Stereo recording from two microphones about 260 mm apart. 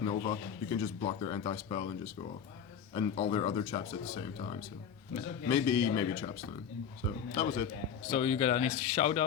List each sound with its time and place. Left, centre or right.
0.0 s a man's voice: left
7.3 s a man's voice: centre